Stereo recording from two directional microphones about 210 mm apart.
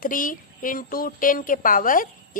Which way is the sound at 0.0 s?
40° left (ahead or behind).